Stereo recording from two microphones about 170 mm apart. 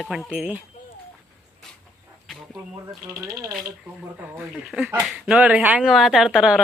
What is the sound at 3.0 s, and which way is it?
Speech, 10° right (ahead or behind).